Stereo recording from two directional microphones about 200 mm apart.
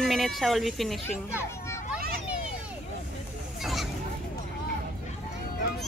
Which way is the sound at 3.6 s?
Centre (ahead or behind).